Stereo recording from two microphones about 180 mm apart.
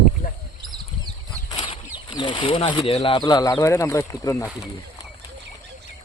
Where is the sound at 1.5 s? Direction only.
30° left (ahead or behind).